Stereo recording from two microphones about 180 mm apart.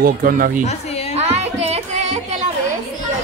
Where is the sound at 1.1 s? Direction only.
35° right (ahead or behind).